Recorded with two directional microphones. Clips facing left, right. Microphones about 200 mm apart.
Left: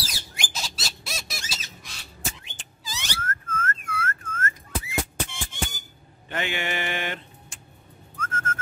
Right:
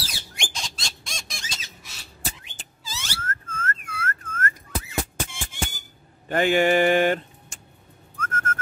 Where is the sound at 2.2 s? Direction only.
35° right (ahead or behind).